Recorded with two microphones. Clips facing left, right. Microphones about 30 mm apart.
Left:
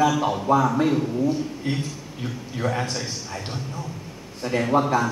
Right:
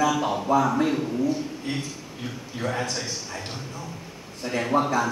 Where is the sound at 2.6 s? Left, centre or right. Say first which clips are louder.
Left 2 dB; centre.